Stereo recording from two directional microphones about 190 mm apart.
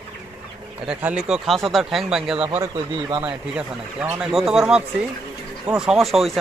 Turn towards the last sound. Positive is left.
turn(degrees=0)  # may be behind; listen again after turning